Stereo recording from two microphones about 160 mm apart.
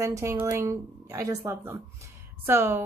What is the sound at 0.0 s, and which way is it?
Speech, 20° right (ahead or behind).